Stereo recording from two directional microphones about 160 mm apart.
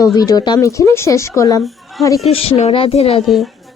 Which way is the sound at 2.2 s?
40° left (ahead or behind).